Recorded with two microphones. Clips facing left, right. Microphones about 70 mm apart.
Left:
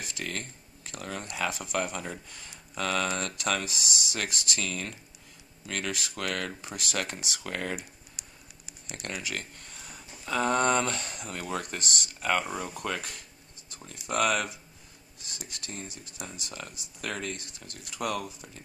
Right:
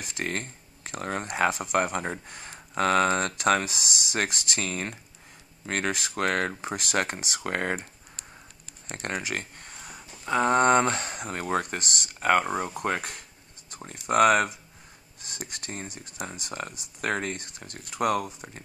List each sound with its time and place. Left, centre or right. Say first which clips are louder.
0.2 s speech: right 6 dB; right
8.8 s a sound: right 5 dB; right
10.2 s speech: right 4 dB; right